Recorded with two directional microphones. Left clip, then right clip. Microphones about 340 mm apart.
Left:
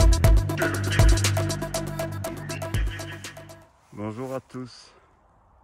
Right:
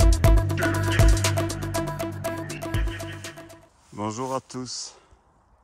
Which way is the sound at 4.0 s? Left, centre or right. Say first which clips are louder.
Right 4 dB; centre.